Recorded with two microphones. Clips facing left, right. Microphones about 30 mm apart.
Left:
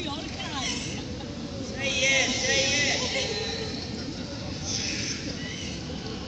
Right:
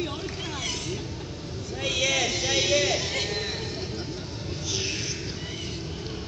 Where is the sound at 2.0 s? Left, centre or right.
Left.